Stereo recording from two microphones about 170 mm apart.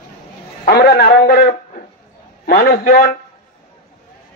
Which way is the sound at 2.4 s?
60° left (ahead or behind).